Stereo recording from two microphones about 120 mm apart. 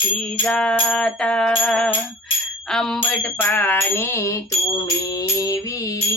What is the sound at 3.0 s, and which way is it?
Music, 15° left (ahead or behind).